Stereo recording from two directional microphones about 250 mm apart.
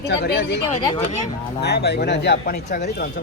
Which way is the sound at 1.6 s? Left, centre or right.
Left.